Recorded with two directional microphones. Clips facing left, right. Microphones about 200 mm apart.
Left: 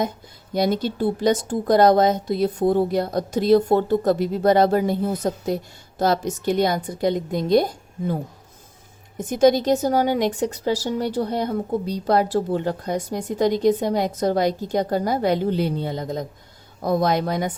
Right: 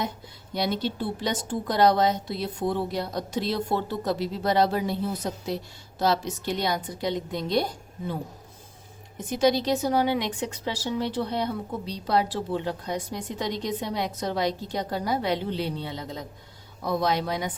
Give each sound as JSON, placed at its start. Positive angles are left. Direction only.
{"t": 0.5, "sound": "a woman's voice", "side_deg": 45}